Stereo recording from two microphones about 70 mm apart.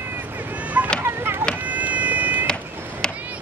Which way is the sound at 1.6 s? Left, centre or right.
Right.